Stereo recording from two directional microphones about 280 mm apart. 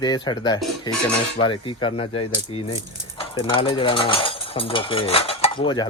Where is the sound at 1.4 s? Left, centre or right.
Centre.